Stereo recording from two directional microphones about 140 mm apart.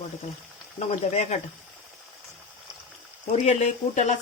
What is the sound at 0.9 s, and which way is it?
Speech, 55° left (ahead or behind).